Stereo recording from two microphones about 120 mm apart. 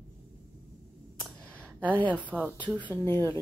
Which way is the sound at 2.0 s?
10° right (ahead or behind).